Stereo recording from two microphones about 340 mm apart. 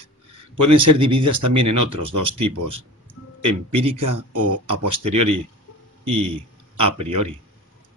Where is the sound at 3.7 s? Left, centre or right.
Centre.